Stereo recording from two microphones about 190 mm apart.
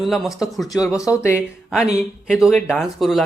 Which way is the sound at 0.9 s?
15° left (ahead or behind).